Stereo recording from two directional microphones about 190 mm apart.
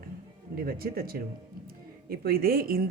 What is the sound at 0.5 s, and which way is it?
Speech, 50° right (ahead or behind).